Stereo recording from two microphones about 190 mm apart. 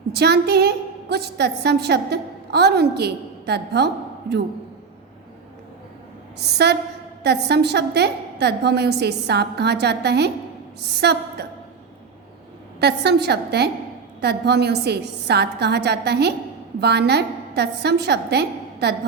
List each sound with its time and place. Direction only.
0.1 s a woman's voice: 60° right (ahead or behind)
6.4 s a woman's voice: 60° right (ahead or behind)
12.8 s a woman's voice: 60° right (ahead or behind)